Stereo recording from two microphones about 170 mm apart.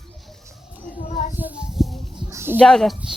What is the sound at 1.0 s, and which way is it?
Child singing, 50° left (ahead or behind).